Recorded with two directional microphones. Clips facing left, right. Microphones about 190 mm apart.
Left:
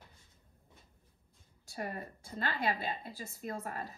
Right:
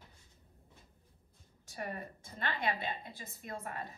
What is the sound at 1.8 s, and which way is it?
Speech, 35° left (ahead or behind).